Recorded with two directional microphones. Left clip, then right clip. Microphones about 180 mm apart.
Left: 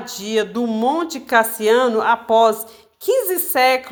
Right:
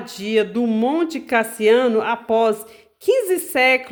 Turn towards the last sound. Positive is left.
turn(degrees=-40)  # may be behind; listen again after turning